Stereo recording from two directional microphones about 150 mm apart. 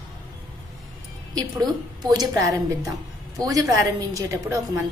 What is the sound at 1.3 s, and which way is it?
A child's voice, 25° right (ahead or behind).